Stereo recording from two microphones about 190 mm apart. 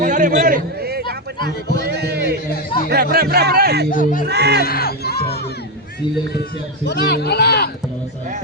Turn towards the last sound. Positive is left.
turn(degrees=60)  # may be behind; listen again after turning